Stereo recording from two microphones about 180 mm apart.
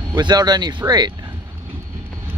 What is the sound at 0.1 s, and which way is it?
Speech, 20° right (ahead or behind).